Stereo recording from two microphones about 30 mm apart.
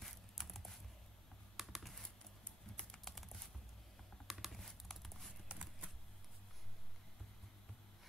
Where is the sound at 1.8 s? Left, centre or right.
Centre.